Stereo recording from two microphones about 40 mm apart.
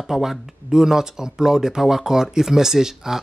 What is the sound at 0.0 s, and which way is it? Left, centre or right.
Speech, centre.